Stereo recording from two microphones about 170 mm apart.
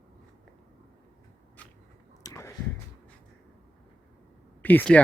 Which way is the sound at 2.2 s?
20° left (ahead or behind).